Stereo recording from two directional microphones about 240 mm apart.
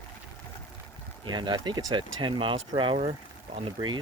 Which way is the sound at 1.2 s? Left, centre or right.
Centre.